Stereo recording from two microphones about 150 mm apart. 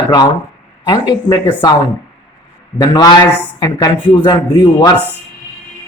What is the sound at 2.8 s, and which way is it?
Speech, 30° left (ahead or behind).